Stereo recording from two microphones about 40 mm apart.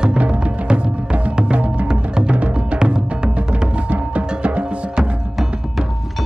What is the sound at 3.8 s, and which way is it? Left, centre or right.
Music, right.